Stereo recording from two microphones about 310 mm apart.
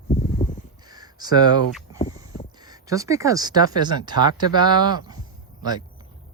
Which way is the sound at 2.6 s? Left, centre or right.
Centre.